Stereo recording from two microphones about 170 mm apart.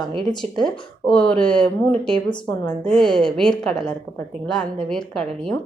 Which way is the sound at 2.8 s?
5° left (ahead or behind).